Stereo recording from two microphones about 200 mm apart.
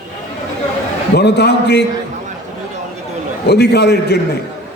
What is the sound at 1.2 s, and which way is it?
Speech, 55° left (ahead or behind).